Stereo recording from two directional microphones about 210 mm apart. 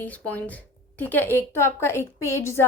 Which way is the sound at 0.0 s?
10° left (ahead or behind).